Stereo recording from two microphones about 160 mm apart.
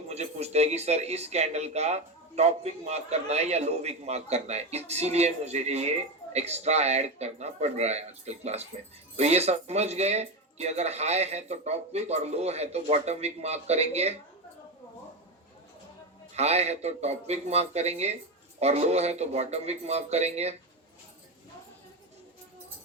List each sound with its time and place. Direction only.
0.1 s speech: 40° right (ahead or behind)
16.3 s speech: 40° right (ahead or behind)